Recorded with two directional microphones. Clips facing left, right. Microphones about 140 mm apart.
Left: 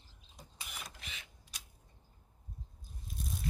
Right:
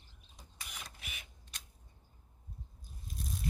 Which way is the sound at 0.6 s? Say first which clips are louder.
Left 1 dB; 5° left (ahead or behind).